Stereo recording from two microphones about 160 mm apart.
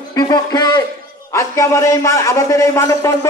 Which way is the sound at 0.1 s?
25° left (ahead or behind).